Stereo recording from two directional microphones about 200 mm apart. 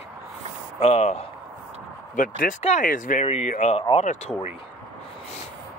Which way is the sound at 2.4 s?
35° left (ahead or behind).